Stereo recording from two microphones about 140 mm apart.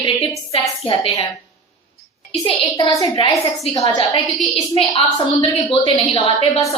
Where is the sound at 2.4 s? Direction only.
30° left (ahead or behind).